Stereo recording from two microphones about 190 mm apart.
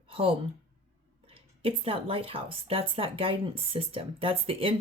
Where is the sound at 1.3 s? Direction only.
30° right (ahead or behind).